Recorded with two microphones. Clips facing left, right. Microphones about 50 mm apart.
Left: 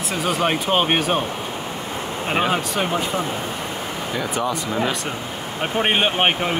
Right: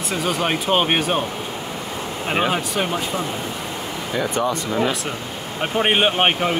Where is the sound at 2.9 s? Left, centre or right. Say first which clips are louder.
Left 1 dB; left.